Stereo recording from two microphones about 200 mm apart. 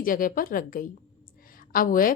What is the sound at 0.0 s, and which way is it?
A woman's voice, 45° left (ahead or behind).